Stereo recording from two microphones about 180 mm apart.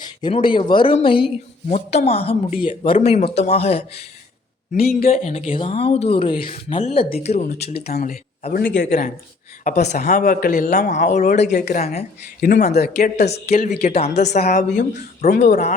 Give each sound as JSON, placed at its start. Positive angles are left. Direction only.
{"t": 0.2, "sound": "speech", "side_deg": 30}
{"t": 7.7, "sound": "speech", "side_deg": 60}
{"t": 8.5, "sound": "a man's voice", "side_deg": 75}
{"t": 8.8, "sound": "speech", "side_deg": 45}
{"t": 12.8, "sound": "speech", "side_deg": 65}
{"t": 13.2, "sound": "speech", "side_deg": 35}